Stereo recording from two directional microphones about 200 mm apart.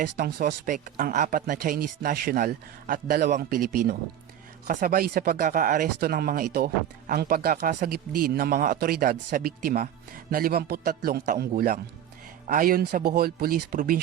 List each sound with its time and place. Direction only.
0.2 s speech: 50° right (ahead or behind)